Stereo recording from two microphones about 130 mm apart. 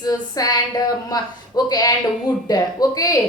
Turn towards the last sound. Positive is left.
turn(degrees=30)  # may be behind; listen again after turning